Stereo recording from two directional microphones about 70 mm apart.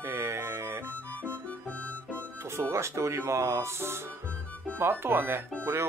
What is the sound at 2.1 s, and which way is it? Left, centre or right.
Speech, right.